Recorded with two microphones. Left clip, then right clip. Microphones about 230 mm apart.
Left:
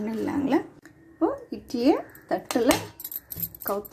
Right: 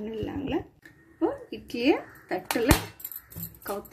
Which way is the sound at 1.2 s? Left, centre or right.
Centre.